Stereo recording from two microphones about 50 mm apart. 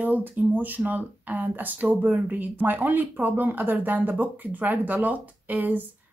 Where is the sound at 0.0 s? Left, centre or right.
Right.